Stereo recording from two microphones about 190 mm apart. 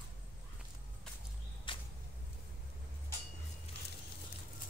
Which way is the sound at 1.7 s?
25° left (ahead or behind).